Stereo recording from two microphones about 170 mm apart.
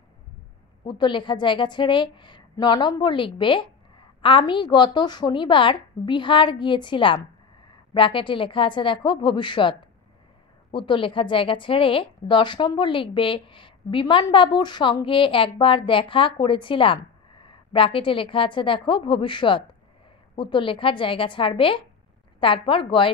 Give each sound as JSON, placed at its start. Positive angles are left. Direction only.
{"t": 0.8, "sound": "a woman's voice", "side_deg": 25}